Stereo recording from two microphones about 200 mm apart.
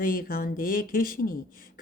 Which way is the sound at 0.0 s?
45° left (ahead or behind).